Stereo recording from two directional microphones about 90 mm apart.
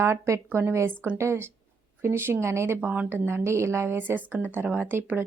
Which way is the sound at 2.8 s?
15° right (ahead or behind).